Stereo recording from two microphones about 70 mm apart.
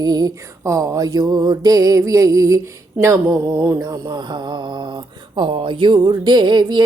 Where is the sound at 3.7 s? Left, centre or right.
Right.